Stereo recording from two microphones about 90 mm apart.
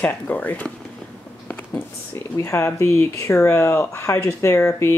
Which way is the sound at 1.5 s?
20° left (ahead or behind).